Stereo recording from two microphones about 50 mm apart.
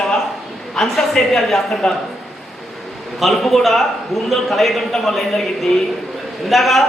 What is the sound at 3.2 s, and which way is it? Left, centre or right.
Speech, centre.